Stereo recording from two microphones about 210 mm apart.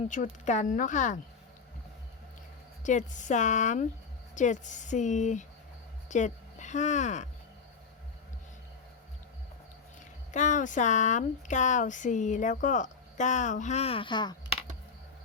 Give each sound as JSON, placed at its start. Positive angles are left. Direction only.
{"t": 0.1, "sound": "speech", "side_deg": 35}
{"t": 2.8, "sound": "speech", "side_deg": 35}
{"t": 10.3, "sound": "speech", "side_deg": 35}